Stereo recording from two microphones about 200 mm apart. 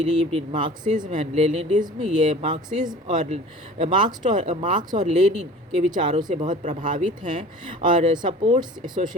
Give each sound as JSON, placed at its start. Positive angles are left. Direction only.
{"t": 0.0, "sound": "speech", "side_deg": -30}